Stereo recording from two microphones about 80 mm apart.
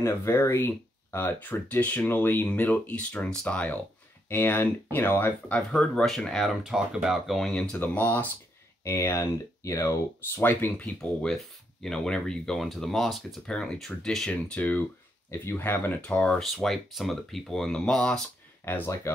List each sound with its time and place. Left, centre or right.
0.0 s speech: left; by 3.6 s centre
4.3 s speech: left
5.7 s speech: centre
7.8 s speech: left
8.8 s speech: left
10.9 s speech: centre
16.3 s speech: centre
18.6 s speech: left